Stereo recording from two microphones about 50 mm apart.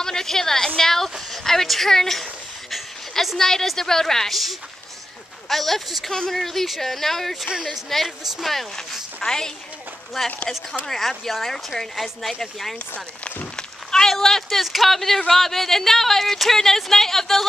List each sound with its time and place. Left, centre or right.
0.0 s a woman's voice: centre
2.7 s a sound: centre
3.3 s a woman's voice: centre
5.5 s speech: centre
7.4 s a woman's voice: centre
7.7 s a woman's voice: centre
13.6 s a sound: centre
14.1 s speech: centre